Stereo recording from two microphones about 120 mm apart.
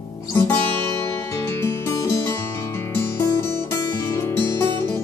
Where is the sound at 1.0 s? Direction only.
20° left (ahead or behind).